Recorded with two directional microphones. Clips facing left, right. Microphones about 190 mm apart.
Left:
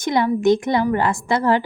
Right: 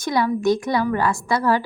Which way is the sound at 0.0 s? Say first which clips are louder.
Left 3 dB; 20° left (ahead or behind).